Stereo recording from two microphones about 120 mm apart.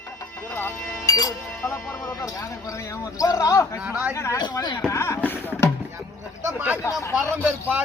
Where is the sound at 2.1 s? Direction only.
25° left (ahead or behind).